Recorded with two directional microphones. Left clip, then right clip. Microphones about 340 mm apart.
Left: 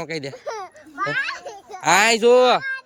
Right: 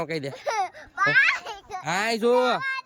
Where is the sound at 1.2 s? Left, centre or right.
Right.